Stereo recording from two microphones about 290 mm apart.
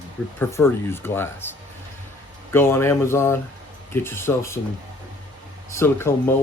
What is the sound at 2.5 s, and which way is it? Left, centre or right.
Speech, centre.